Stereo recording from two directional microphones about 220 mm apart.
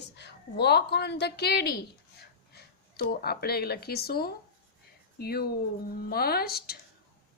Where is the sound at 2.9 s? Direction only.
45° left (ahead or behind).